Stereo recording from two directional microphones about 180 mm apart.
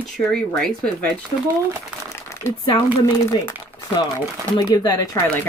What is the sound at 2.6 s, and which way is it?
Speech, 25° left (ahead or behind).